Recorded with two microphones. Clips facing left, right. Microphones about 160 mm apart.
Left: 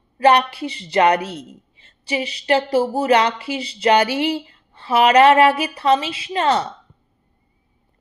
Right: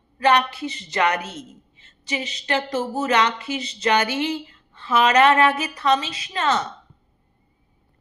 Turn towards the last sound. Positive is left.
turn(degrees=30)  # may be behind; listen again after turning